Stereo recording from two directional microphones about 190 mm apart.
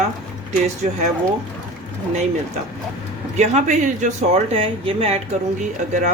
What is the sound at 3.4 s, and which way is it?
Speech, 40° right (ahead or behind).